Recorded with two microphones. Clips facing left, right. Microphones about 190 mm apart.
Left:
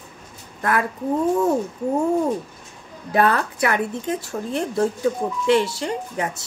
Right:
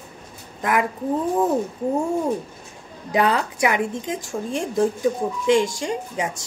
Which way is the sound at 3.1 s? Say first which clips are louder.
Left 1 dB; 15° right (ahead or behind).